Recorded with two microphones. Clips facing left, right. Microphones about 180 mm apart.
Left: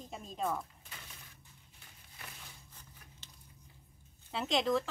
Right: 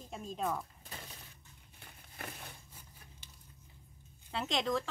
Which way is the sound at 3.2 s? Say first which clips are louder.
Even; 10° right (ahead or behind).